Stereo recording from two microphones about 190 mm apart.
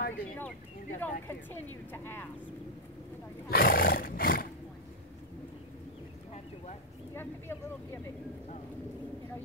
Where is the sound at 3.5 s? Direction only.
50° left (ahead or behind).